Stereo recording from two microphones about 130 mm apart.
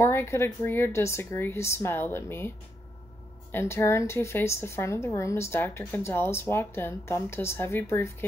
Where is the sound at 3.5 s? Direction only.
20° left (ahead or behind).